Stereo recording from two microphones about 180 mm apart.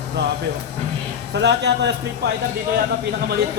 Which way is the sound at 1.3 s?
70° right (ahead or behind).